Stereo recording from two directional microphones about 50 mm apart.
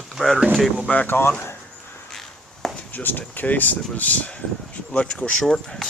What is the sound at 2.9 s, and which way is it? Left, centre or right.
Speech, left.